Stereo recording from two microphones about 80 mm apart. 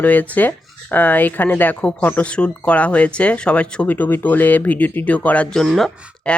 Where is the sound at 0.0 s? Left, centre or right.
Left.